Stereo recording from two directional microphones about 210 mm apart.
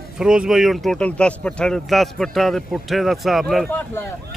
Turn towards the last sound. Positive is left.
turn(degrees=5)  # may be behind; listen again after turning